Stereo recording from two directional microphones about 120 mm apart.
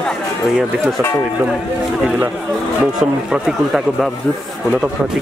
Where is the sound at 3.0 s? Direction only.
5° right (ahead or behind).